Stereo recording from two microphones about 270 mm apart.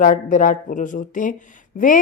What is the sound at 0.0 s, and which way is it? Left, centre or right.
A woman's voice, left.